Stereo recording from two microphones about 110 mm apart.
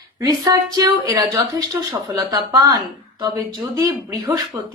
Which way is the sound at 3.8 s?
30° right (ahead or behind).